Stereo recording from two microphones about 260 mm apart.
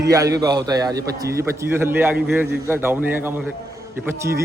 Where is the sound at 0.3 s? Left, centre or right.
Centre.